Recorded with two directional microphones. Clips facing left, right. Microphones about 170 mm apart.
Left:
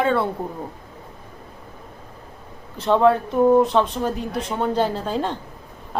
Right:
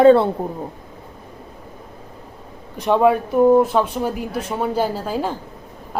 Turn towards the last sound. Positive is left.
turn(degrees=-5)  # may be behind; listen again after turning